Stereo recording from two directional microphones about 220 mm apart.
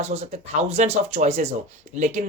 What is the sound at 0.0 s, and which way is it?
Speech, 30° right (ahead or behind).